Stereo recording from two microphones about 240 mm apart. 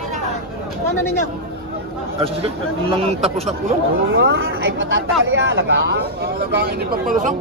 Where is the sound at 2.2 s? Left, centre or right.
Right.